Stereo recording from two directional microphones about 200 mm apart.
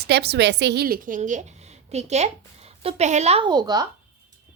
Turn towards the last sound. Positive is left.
turn(degrees=-20)  # may be behind; listen again after turning